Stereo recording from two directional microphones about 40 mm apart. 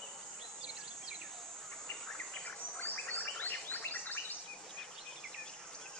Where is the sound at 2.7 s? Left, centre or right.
Left.